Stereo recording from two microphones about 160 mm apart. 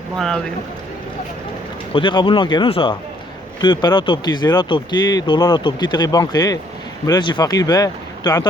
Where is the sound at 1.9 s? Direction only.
30° left (ahead or behind).